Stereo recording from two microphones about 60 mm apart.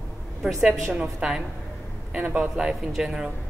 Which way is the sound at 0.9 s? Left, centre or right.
Centre.